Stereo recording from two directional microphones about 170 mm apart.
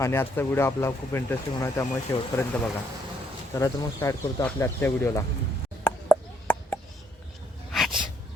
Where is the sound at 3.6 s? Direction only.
20° left (ahead or behind).